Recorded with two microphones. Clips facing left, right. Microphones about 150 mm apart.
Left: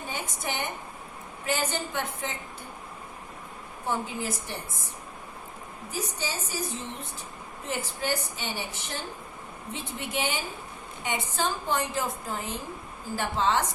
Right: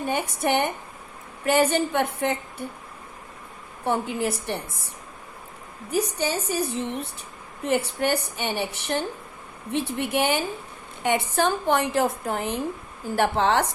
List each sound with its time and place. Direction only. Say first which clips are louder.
0.1 s a woman's voice: right 11 dB; 60° right (ahead or behind)
3.8 s a woman's voice: right 6 dB; 65° right (ahead or behind)
5.9 s a woman's voice: right 9 dB; 65° right (ahead or behind)